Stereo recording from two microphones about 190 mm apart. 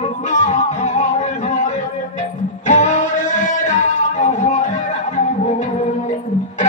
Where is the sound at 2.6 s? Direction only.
40° left (ahead or behind).